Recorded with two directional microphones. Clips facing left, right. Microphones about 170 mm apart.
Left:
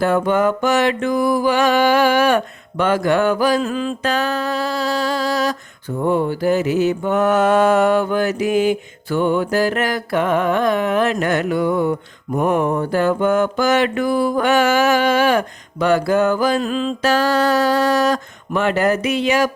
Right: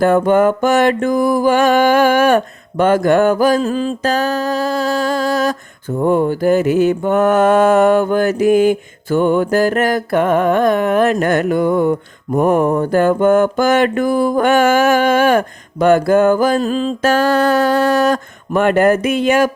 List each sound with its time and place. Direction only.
0.0 s mantra: 50° right (ahead or behind)